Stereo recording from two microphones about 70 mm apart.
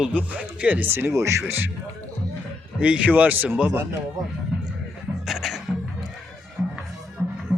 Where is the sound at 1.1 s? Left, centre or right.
Right.